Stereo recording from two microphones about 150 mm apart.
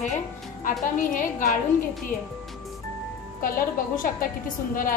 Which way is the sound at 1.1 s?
60° left (ahead or behind).